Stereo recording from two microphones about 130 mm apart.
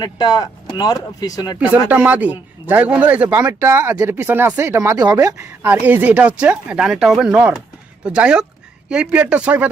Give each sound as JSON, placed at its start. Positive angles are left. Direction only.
{"t": 0.0, "sound": "speech", "side_deg": 30}
{"t": 1.9, "sound": "speech", "side_deg": -10}
{"t": 5.6, "sound": "speech", "side_deg": -10}